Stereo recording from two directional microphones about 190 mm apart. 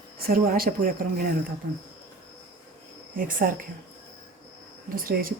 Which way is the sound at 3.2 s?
45° right (ahead or behind).